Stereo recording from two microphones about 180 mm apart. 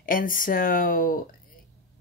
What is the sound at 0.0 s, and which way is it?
Speech, 50° left (ahead or behind).